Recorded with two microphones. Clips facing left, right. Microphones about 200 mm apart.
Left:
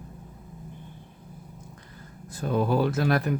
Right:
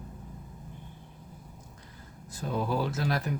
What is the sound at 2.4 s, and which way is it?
Speech, 60° left (ahead or behind).